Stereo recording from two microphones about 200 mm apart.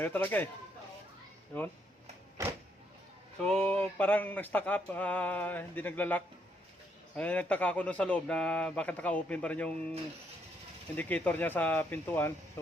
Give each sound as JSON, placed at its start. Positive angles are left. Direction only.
{"t": 0.0, "sound": "speech", "side_deg": 10}
{"t": 2.4, "sound": "power windows", "side_deg": -15}
{"t": 3.3, "sound": "speech", "side_deg": 5}
{"t": 10.9, "sound": "speech", "side_deg": 10}